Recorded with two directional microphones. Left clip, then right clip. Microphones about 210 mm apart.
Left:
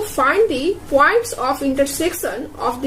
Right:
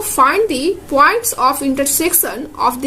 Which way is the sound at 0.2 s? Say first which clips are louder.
Right 3 dB; 60° right (ahead or behind).